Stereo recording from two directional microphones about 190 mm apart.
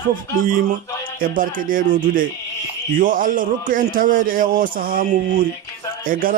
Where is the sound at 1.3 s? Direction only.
45° right (ahead or behind).